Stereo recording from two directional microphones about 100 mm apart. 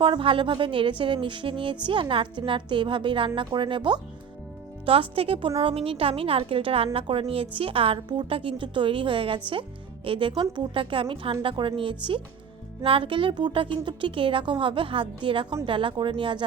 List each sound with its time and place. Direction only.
0.0 s a woman's voice: 60° right (ahead or behind)
4.9 s a woman's voice: 70° right (ahead or behind)